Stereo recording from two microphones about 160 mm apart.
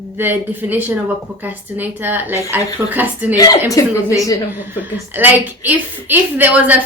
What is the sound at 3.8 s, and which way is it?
Speech, 20° left (ahead or behind).